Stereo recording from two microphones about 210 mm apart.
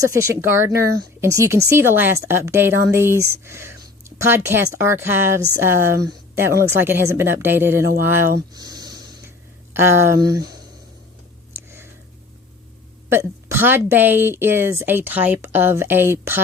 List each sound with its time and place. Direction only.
0.1 s a woman's voice: 10° right (ahead or behind)
8.5 s snort: 20° right (ahead or behind)
9.7 s a woman's voice: 10° right (ahead or behind)
11.5 s a sound: 15° right (ahead or behind)
13.1 s a woman's voice: 10° right (ahead or behind)